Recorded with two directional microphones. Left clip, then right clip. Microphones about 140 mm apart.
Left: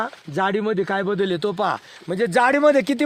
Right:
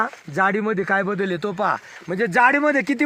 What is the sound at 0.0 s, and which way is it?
Speech, 55° left (ahead or behind).